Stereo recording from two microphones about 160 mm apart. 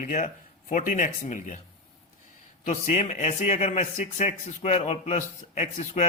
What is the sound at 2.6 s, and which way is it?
A man's voice, 50° left (ahead or behind).